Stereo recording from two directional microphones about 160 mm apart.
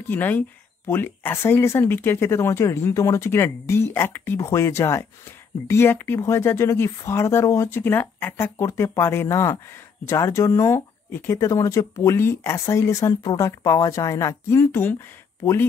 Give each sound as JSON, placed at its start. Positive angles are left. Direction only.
{"t": 0.1, "sound": "speech", "side_deg": 10}